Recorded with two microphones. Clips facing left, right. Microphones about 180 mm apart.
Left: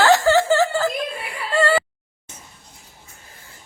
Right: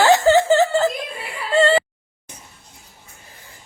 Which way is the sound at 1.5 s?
25° right (ahead or behind).